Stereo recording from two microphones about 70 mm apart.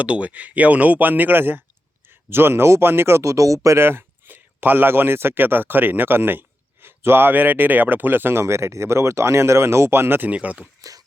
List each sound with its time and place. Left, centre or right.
0.0 s speech: centre
10.8 s speech: right